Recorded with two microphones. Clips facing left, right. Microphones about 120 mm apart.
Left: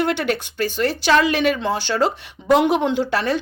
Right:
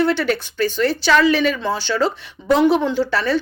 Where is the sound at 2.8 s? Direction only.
55° left (ahead or behind).